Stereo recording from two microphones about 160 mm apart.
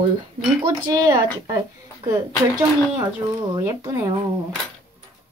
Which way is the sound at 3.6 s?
20° right (ahead or behind).